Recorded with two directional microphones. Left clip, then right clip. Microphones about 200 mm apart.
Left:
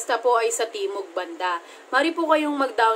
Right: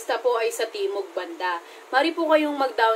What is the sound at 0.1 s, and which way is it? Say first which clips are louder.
A woman's voice: left 2 dB; 20° left (ahead or behind).